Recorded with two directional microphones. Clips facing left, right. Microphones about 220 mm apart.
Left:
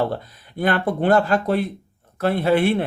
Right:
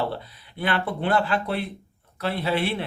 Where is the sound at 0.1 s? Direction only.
45° left (ahead or behind).